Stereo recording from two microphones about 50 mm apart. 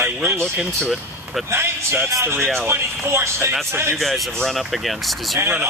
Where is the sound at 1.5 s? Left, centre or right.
Right.